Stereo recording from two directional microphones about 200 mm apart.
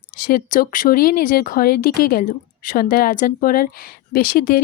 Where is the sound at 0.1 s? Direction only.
45° left (ahead or behind).